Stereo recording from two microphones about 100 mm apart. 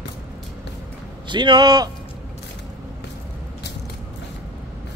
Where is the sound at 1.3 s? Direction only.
50° right (ahead or behind).